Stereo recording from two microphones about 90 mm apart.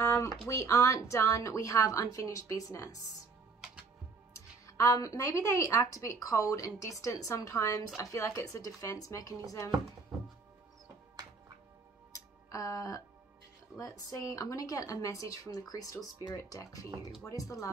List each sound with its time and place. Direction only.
0.0 s a sound: 30° left (ahead or behind)
0.5 s a woman's voice: 35° left (ahead or behind)
4.6 s a woman's voice: 35° left (ahead or behind)
12.1 s music: 40° left (ahead or behind)
13.7 s a woman's voice: 40° left (ahead or behind)